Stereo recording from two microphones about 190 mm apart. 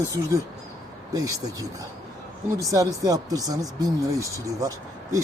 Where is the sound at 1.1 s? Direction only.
15° right (ahead or behind).